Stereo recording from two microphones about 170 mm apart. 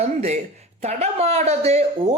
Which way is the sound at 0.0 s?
40° right (ahead or behind).